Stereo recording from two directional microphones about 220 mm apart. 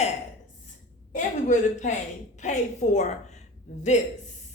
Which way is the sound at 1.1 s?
35° left (ahead or behind).